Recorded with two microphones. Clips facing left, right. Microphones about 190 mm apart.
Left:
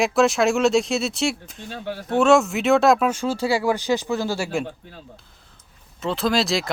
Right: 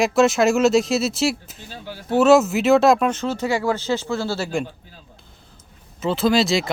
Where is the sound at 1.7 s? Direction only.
60° left (ahead or behind).